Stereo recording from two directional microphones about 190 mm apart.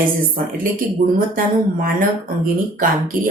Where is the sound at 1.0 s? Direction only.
45° right (ahead or behind).